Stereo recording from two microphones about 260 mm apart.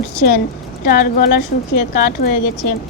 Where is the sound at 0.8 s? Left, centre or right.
Left.